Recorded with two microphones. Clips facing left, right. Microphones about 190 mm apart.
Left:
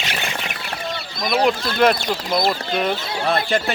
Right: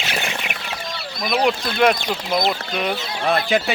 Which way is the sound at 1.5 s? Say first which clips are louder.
Even; centre (ahead or behind).